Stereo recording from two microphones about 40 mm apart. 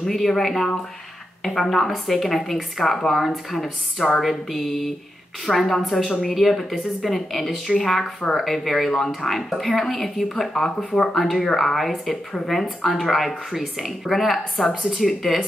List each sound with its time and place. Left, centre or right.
0.0 s speech: centre
10.8 s speech: left
11.1 s speech: centre